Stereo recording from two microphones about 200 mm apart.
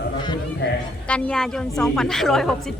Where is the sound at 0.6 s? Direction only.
60° left (ahead or behind).